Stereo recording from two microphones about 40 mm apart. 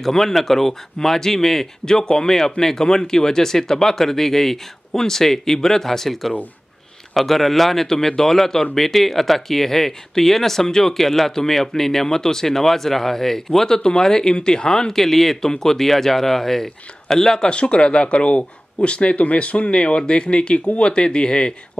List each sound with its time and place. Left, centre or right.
0.0 s speech: centre
1.9 s speech: centre
17.5 s speech: left
19.7 s speech: left